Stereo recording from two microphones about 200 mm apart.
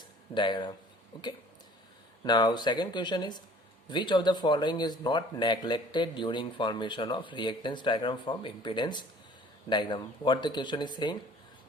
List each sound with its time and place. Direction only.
0.3 s speech: 25° left (ahead or behind)
2.2 s speech: 20° left (ahead or behind)